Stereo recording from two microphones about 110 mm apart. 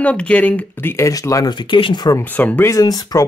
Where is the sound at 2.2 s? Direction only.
15° left (ahead or behind).